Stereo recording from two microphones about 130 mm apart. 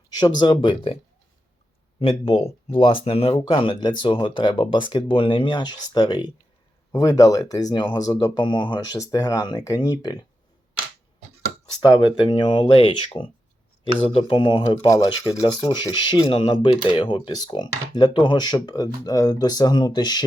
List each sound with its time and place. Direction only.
0.1 s speech: 35° left (ahead or behind)
2.0 s speech: 45° left (ahead or behind)
9.0 s speech: 25° left (ahead or behind)
11.8 s speech: 40° left (ahead or behind)
15.9 s speech: 35° left (ahead or behind)